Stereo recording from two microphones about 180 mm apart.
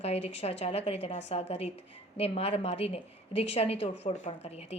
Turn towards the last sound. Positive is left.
turn(degrees=35)  # may be behind; listen again after turning